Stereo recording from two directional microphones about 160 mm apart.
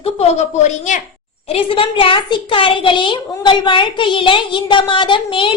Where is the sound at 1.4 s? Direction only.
35° left (ahead or behind).